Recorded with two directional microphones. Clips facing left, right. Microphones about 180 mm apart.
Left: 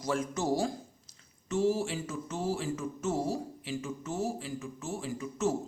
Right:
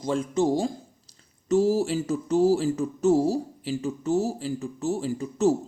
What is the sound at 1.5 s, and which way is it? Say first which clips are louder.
Speech: right 7 dB; 35° right (ahead or behind).